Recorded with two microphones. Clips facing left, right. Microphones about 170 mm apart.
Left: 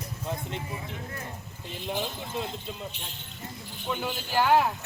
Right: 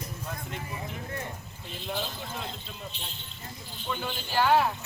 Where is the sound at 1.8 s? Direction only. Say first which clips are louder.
Left 2 dB; 15° left (ahead or behind).